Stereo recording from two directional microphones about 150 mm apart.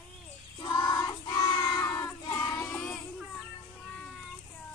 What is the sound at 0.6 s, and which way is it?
Chicken, 30° left (ahead or behind).